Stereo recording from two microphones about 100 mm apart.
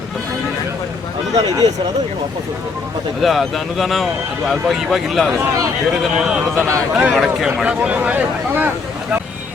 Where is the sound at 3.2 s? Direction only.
Centre (ahead or behind); by 9.2 s 15° right (ahead or behind).